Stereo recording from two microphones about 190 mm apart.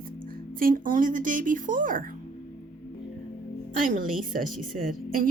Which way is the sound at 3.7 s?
45° right (ahead or behind).